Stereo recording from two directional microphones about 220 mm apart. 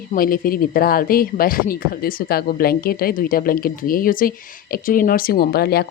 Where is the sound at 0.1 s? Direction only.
40° left (ahead or behind).